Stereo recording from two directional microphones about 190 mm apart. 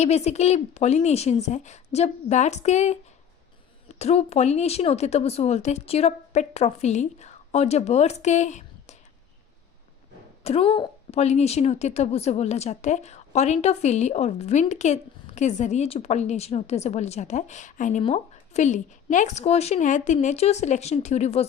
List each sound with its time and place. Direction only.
0.0 s speech: 35° left (ahead or behind)
10.4 s speech: 30° left (ahead or behind)